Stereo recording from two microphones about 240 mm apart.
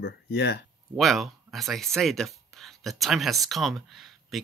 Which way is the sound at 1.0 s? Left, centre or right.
Centre.